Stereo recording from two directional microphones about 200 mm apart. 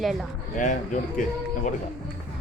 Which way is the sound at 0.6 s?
40° left (ahead or behind).